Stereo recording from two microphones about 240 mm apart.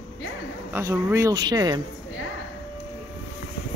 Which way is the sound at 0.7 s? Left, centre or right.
Centre.